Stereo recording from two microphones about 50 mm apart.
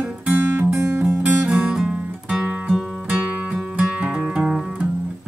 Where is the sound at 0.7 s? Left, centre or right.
Right.